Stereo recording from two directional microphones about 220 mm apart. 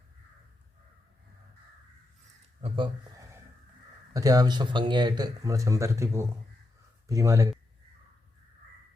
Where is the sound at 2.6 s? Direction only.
25° right (ahead or behind).